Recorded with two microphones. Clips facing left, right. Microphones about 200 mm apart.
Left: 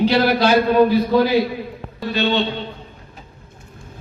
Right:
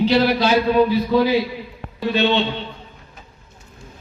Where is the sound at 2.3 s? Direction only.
40° left (ahead or behind).